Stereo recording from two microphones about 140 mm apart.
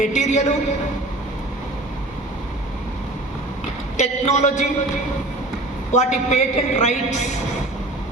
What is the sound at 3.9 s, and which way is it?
Speech, 55° left (ahead or behind).